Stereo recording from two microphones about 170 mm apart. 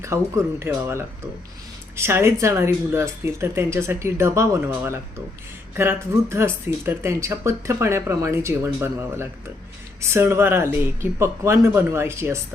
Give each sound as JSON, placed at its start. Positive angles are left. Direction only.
{"t": 0.1, "sound": "speech", "side_deg": -15}